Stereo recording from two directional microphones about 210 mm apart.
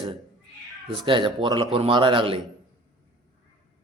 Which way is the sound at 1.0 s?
25° right (ahead or behind).